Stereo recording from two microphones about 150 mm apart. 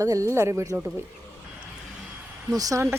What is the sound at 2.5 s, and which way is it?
Speech, 25° right (ahead or behind).